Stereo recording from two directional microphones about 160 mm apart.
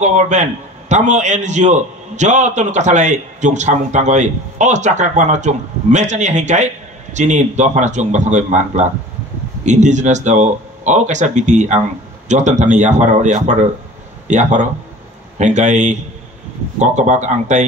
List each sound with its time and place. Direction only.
0.0 s a man's voice: 50° right (ahead or behind)